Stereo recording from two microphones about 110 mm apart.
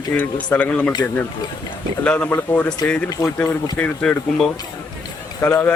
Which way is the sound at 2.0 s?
10° left (ahead or behind).